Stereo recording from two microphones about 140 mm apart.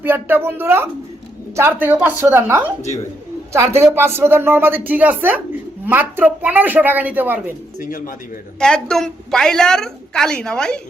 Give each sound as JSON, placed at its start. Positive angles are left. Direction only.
{"t": 0.0, "sound": "speech", "side_deg": -15}
{"t": 7.8, "sound": "speech", "side_deg": 80}
{"t": 8.5, "sound": "a woman's voice", "side_deg": 5}